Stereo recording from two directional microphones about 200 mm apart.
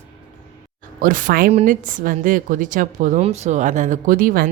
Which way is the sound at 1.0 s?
40° right (ahead or behind).